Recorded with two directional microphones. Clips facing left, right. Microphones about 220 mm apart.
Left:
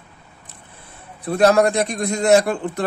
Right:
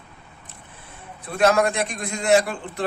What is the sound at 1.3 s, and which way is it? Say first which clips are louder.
Speech: left 4 dB; 35° left (ahead or behind).